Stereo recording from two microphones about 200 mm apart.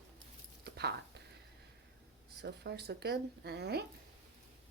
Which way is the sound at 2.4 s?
55° right (ahead or behind).